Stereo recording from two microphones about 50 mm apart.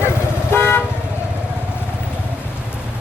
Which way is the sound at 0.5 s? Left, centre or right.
Left.